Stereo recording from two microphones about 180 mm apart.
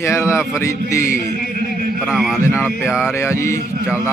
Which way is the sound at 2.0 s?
Centre (ahead or behind).